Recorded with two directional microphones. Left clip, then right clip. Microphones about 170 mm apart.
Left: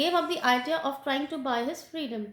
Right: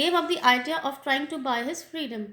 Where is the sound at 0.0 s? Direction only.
30° right (ahead or behind).